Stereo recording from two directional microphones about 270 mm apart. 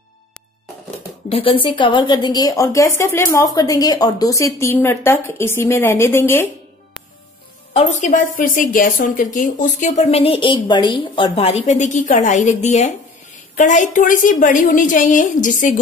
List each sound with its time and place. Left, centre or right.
1.3 s a woman's voice: centre
7.7 s a woman's voice: left